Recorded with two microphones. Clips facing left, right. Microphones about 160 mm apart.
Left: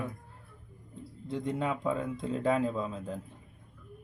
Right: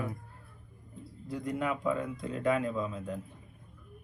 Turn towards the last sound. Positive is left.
turn(degrees=30)  # may be behind; listen again after turning